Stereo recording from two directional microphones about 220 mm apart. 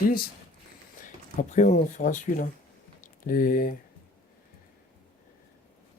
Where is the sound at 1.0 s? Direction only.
35° left (ahead or behind).